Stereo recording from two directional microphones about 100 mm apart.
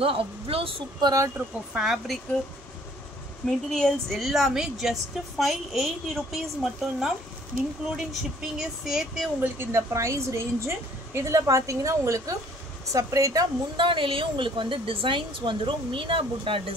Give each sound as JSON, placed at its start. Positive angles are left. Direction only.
{"t": 0.0, "sound": "speech", "side_deg": -70}
{"t": 1.0, "sound": "a woman's voice", "side_deg": -35}
{"t": 1.7, "sound": "a woman's voice", "side_deg": -5}
{"t": 3.4, "sound": "a woman's voice", "side_deg": 5}
{"t": 9.4, "sound": "a woman's voice", "side_deg": -25}
{"t": 13.7, "sound": "a woman's voice", "side_deg": -55}